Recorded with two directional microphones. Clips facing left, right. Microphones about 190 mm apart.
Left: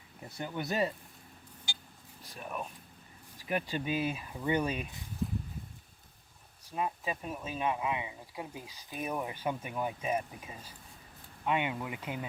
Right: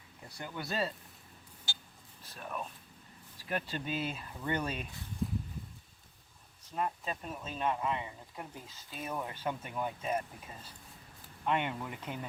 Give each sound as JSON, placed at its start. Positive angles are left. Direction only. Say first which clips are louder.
{"t": 0.3, "sound": "speech", "louder": "left 4 dB", "side_deg": 20}
{"t": 2.2, "sound": "speech", "louder": "left 1 dB", "side_deg": 10}
{"t": 6.7, "sound": "speech", "louder": "left 1 dB", "side_deg": 10}